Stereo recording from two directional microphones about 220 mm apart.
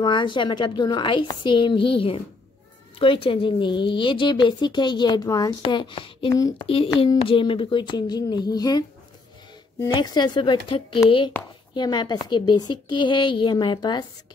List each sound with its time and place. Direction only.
0.0 s speech: 20° left (ahead or behind)